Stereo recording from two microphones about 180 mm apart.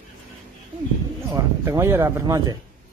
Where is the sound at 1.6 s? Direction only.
15° right (ahead or behind).